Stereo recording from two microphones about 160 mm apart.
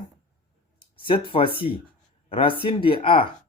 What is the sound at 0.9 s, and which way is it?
Speech, 30° left (ahead or behind).